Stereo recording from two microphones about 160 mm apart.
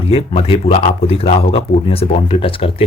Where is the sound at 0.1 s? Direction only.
35° left (ahead or behind).